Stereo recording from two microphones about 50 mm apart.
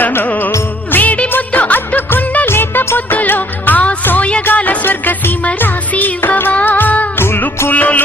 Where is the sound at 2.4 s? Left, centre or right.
Left.